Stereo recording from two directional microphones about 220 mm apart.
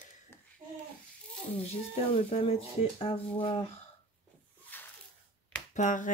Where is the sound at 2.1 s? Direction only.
25° left (ahead or behind).